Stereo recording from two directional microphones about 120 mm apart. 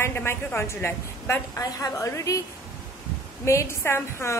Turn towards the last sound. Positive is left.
turn(degrees=20)  # may be behind; listen again after turning